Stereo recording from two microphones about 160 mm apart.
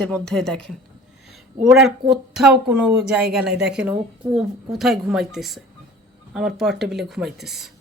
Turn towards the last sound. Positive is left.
turn(degrees=0)  # may be behind; listen again after turning